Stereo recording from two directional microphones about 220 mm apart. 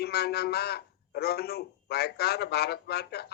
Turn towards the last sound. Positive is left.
turn(degrees=45)  # may be behind; listen again after turning